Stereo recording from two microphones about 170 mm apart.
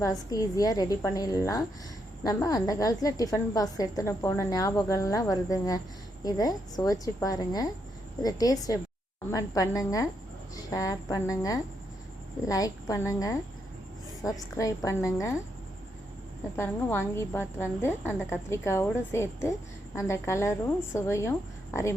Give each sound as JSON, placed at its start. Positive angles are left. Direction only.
{"t": 0.0, "sound": "a woman's voice", "side_deg": 20}
{"t": 16.6, "sound": "a woman's voice", "side_deg": 15}